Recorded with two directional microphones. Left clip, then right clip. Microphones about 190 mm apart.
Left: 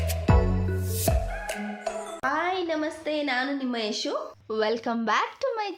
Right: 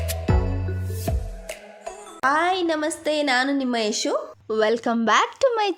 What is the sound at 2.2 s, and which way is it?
A woman's voice, 60° right (ahead or behind).